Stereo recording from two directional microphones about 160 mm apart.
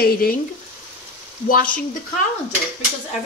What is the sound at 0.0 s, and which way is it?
Speech, 70° left (ahead or behind).